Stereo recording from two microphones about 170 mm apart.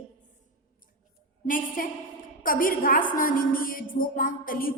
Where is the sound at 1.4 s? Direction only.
55° left (ahead or behind).